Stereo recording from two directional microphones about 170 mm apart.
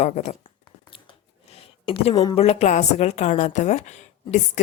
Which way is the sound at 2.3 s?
35° left (ahead or behind).